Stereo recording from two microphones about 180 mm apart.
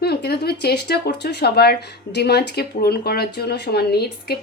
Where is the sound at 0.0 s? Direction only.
65° left (ahead or behind).